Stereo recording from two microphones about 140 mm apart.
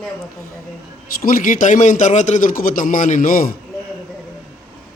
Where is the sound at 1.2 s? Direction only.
90° left.